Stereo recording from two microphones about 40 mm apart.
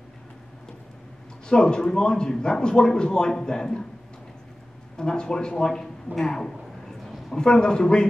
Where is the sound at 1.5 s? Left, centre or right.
Centre.